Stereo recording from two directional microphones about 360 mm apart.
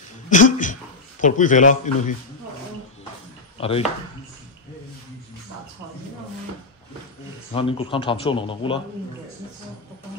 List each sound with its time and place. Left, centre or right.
0.3 s a sound: left
1.2 s a man's voice: left
3.5 s speech: centre
7.5 s speech: centre